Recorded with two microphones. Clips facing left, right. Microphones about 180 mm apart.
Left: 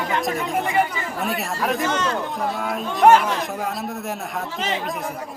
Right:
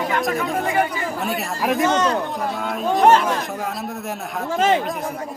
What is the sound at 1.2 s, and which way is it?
Speech, centre (ahead or behind).